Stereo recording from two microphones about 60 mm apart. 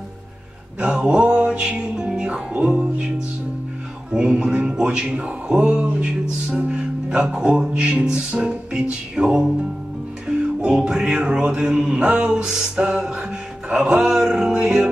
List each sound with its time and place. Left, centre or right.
0.7 s music: centre
4.1 s music: centre